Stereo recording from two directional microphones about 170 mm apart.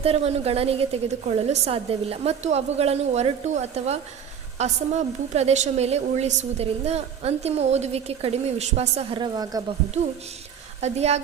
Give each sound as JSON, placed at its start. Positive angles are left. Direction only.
{"t": 0.0, "sound": "a woman's voice", "side_deg": -35}
{"t": 10.8, "sound": "a woman's voice", "side_deg": -40}